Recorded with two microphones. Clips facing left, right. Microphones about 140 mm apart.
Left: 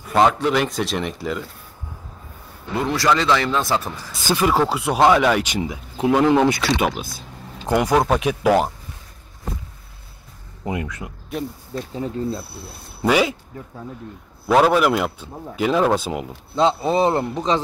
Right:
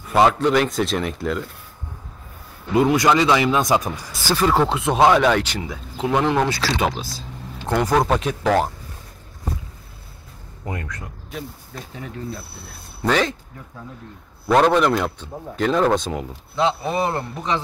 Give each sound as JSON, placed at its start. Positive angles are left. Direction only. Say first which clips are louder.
{"t": 0.1, "sound": "speech", "louder": "right 1 dB", "side_deg": 0}
{"t": 2.7, "sound": "a man's voice", "louder": "right 4 dB", "side_deg": -15}
{"t": 4.3, "sound": "speech", "louder": "even", "side_deg": 10}
{"t": 5.4, "sound": "speech", "louder": "left 3 dB", "side_deg": 15}
{"t": 7.0, "sound": "speech", "louder": "even", "side_deg": 55}
{"t": 7.6, "sound": "speech", "louder": "left 1 dB", "side_deg": 10}
{"t": 10.6, "sound": "speech", "louder": "left 4 dB", "side_deg": 15}
{"t": 11.9, "sound": "a man's voice", "louder": "left 7 dB", "side_deg": 30}
{"t": 13.0, "sound": "speech", "louder": "left 2 dB", "side_deg": 10}
{"t": 14.5, "sound": "speech", "louder": "even", "side_deg": 5}
{"t": 16.5, "sound": "a man's voice", "louder": "left 3 dB", "side_deg": 30}